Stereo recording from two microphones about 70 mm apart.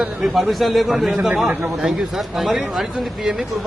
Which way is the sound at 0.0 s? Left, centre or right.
Centre.